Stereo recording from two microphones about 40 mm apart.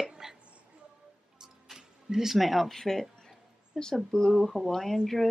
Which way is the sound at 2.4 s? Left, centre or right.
Centre.